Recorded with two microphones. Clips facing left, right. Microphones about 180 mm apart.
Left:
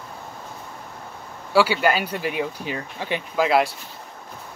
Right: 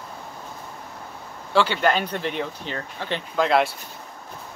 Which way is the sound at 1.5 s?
10° left (ahead or behind).